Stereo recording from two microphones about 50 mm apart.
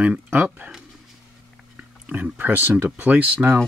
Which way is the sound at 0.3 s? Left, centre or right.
Right.